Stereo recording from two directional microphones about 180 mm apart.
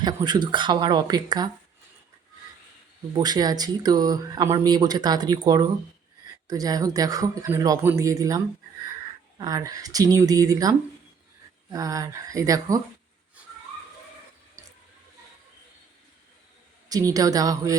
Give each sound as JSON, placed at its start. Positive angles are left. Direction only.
{"t": 0.0, "sound": "speech", "side_deg": -25}
{"t": 3.2, "sound": "speech", "side_deg": -20}
{"t": 9.4, "sound": "speech", "side_deg": -20}
{"t": 16.9, "sound": "speech", "side_deg": -20}